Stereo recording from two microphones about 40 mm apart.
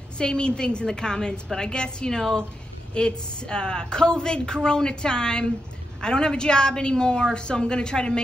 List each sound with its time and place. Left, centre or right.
0.2 s a woman's voice: left